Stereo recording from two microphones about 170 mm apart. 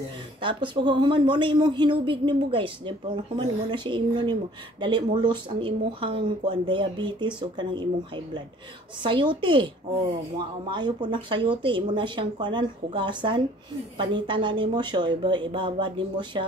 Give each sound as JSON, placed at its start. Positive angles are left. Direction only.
{"t": 0.4, "sound": "speech", "side_deg": -30}
{"t": 3.7, "sound": "speech", "side_deg": -25}
{"t": 9.0, "sound": "speech", "side_deg": -30}